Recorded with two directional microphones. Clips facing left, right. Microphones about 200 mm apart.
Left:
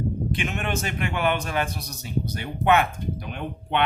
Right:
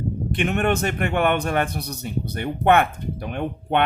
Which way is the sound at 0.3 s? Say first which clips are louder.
Right 6 dB; 60° right (ahead or behind).